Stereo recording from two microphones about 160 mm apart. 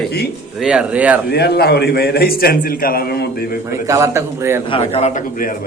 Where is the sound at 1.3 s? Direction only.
85° left.